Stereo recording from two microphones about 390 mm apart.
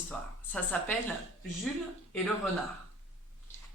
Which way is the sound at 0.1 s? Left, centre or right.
Centre.